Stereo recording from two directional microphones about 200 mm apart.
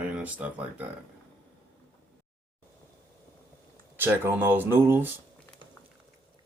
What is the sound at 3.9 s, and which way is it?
Speech, 10° right (ahead or behind).